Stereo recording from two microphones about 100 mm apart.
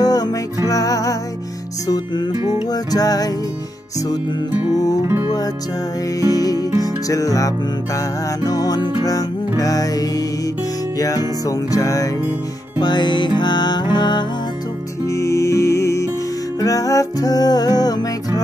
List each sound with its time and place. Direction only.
0.0 s music: 40° left (ahead or behind)
2.7 s music: 40° left (ahead or behind)
5.0 s music: 25° right (ahead or behind)
6.3 s music: 40° left (ahead or behind)
12.7 s music: 45° left (ahead or behind)
15.0 s music: 30° left (ahead or behind)